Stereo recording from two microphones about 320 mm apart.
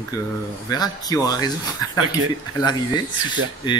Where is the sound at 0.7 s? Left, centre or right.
Centre.